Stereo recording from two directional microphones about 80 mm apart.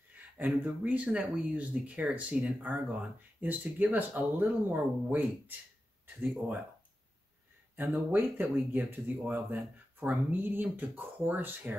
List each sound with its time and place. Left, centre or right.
0.4 s speech: centre
7.7 s speech: right